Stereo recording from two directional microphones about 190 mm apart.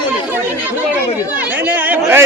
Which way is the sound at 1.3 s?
10° right (ahead or behind).